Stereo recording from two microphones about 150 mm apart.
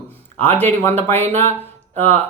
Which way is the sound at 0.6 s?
15° left (ahead or behind).